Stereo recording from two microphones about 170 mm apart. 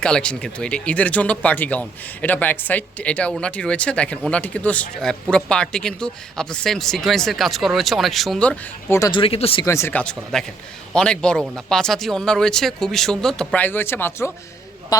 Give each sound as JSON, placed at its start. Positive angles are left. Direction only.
{"t": 0.0, "sound": "speech", "side_deg": 5}
{"t": 9.0, "sound": "speech", "side_deg": 25}
{"t": 9.6, "sound": "speech", "side_deg": 15}